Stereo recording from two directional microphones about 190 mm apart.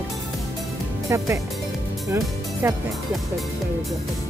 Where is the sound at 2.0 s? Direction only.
15° right (ahead or behind).